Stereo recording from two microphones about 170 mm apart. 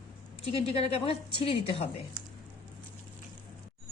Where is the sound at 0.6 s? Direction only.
35° left (ahead or behind).